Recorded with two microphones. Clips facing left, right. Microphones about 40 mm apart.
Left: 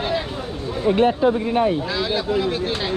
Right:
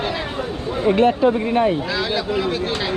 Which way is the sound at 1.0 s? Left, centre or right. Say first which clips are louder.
Right 1 dB; right.